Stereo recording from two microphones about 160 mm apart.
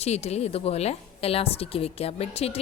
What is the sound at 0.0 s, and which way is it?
A woman's voice, 40° left (ahead or behind).